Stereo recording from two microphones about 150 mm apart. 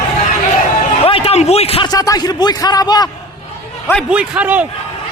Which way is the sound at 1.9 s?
25° left (ahead or behind).